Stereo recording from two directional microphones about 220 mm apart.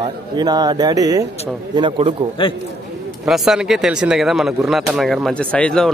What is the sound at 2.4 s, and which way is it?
Speech, 20° left (ahead or behind).